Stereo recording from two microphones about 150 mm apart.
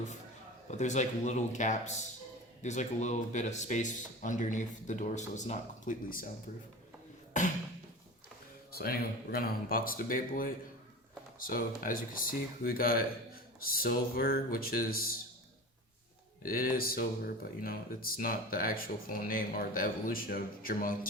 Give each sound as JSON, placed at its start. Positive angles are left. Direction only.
{"t": 0.7, "sound": "speech", "side_deg": 50}
{"t": 8.7, "sound": "speech", "side_deg": 90}
{"t": 16.4, "sound": "speech", "side_deg": 70}